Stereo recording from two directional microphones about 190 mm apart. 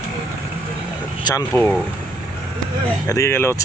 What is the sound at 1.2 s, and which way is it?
Speech, 20° left (ahead or behind).